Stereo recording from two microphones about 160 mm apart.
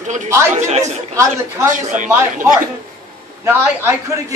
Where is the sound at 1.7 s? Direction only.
50° right (ahead or behind).